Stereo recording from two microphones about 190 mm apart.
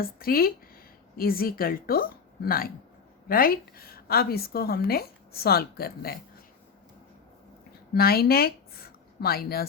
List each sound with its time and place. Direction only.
0.0 s a woman's voice: 50° left (ahead or behind)
7.9 s speech: 55° left (ahead or behind)